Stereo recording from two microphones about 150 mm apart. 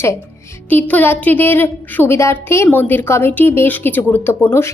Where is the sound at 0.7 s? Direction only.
10° left (ahead or behind).